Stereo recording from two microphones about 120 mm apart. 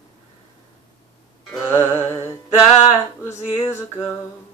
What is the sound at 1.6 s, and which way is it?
Music, 15° left (ahead or behind).